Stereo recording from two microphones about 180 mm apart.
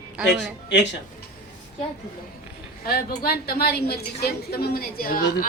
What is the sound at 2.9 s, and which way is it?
A woman's voice, 60° left (ahead or behind).